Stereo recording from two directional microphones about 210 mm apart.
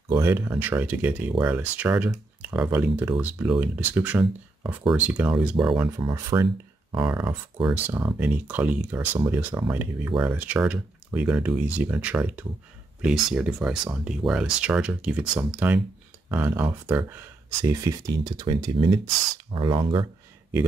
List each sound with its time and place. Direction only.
0.1 s speech: 10° right (ahead or behind)
5.7 s speech: 20° right (ahead or behind)